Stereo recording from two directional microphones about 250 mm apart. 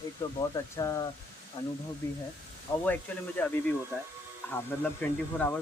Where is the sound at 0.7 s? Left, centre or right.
Centre.